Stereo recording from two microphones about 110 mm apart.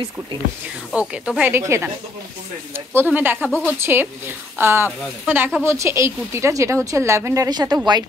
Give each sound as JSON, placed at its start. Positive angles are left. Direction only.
{"t": 0.9, "sound": "speech", "side_deg": -10}
{"t": 1.5, "sound": "a woman's voice", "side_deg": -25}
{"t": 2.9, "sound": "a woman's voice", "side_deg": -20}